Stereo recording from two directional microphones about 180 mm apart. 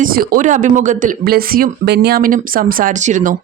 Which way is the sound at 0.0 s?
55° right (ahead or behind).